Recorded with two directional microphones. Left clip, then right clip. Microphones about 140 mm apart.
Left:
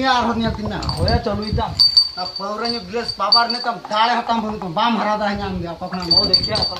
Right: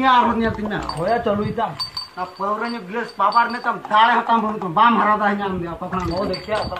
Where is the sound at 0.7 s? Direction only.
10° right (ahead or behind).